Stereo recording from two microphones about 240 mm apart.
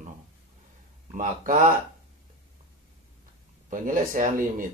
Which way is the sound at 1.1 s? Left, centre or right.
Right.